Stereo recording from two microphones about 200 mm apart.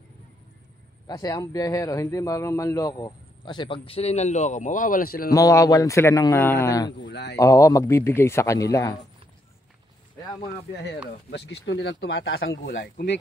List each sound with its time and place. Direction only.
1.0 s a man's voice: 20° left (ahead or behind); by 5.3 s 45° left (ahead or behind)
5.3 s a man's voice: 15° left (ahead or behind)
7.1 s speech: 60° left (ahead or behind)
7.3 s a man's voice: 15° left (ahead or behind)
11.2 s speech: 55° left (ahead or behind)